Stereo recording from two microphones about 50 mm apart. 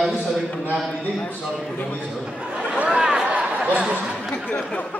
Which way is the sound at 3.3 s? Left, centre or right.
Right.